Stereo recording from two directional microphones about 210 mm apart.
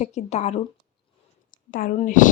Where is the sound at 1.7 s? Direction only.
40° left (ahead or behind).